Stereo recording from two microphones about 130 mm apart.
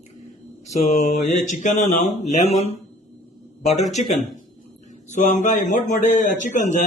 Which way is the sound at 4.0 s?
60° left (ahead or behind).